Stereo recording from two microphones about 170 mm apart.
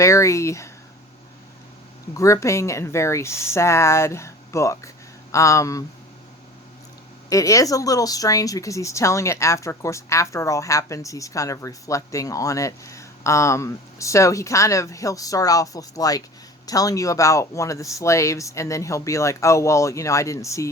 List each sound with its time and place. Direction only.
0.0 s speech: 15° left (ahead or behind)
2.1 s speech: 20° left (ahead or behind)
7.3 s speech: 20° left (ahead or behind)